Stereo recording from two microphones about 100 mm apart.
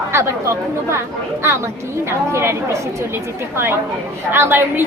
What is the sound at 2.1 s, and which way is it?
A woman's voice, 25° right (ahead or behind).